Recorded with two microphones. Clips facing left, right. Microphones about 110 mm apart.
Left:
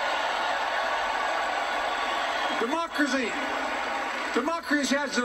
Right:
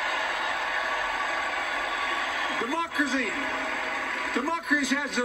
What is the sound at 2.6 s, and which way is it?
Speech, 25° left (ahead or behind).